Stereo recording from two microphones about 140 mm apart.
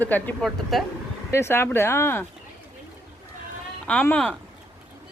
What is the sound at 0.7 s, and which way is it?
Speech, centre (ahead or behind).